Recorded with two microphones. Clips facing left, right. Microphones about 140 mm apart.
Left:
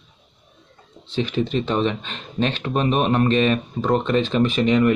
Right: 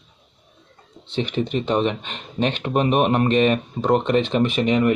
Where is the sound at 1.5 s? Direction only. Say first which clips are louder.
Right 2 dB; 15° right (ahead or behind).